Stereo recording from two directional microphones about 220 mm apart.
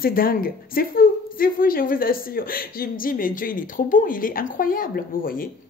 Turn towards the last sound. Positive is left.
turn(degrees=40)  # may be behind; listen again after turning